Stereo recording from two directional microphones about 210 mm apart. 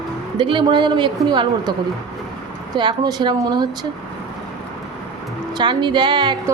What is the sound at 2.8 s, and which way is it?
A woman's voice, 20° right (ahead or behind).